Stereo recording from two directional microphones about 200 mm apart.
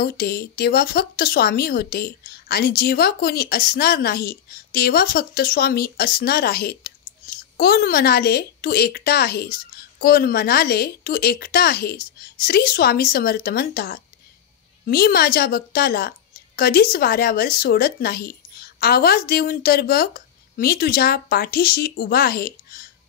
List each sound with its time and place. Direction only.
0.0 s speech: 50° left (ahead or behind)